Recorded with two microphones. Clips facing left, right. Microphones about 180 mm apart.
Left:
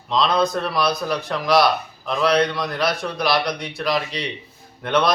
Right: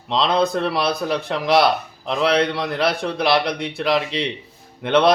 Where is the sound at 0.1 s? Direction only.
25° right (ahead or behind).